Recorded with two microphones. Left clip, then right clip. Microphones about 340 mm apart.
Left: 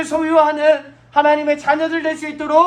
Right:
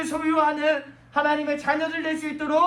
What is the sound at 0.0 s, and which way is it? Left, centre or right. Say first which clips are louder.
A man's voice: left 8 dB; left.